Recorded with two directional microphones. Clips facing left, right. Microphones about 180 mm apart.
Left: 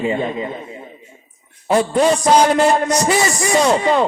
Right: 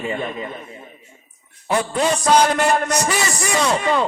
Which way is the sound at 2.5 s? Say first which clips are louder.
Left 4 dB; 25° left (ahead or behind).